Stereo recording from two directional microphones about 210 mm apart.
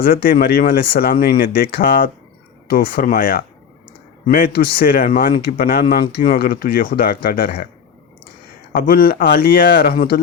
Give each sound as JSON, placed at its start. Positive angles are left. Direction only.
{"t": 0.0, "sound": "a man's voice", "side_deg": 45}
{"t": 8.7, "sound": "a man's voice", "side_deg": 45}